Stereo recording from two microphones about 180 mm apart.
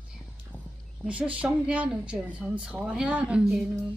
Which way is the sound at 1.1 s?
5° right (ahead or behind).